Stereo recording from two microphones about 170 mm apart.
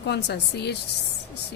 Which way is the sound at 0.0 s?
80° left.